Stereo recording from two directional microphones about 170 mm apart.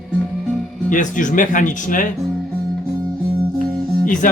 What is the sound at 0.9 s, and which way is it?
Speech, 50° left (ahead or behind).